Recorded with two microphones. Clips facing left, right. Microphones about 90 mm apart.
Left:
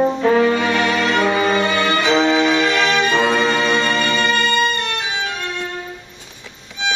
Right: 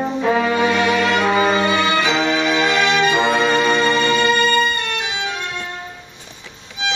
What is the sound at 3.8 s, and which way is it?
Music, 10° right (ahead or behind).